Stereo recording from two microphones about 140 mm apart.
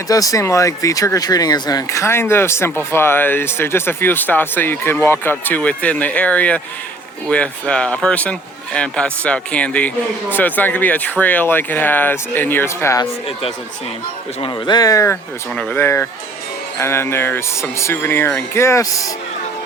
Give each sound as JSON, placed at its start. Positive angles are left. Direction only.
{"t": 0.1, "sound": "speech", "side_deg": 25}
{"t": 14.4, "sound": "speech", "side_deg": 35}
{"t": 15.1, "sound": "speech", "side_deg": 10}